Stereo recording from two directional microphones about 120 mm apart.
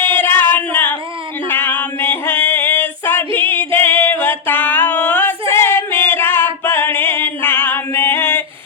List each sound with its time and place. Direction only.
0.2 s singing: 15° left (ahead or behind)
1.5 s music: 15° left (ahead or behind)